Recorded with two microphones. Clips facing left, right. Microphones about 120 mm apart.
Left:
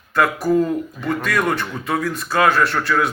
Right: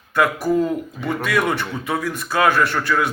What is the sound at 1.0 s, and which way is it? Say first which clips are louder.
Speech: even; 5° right (ahead or behind).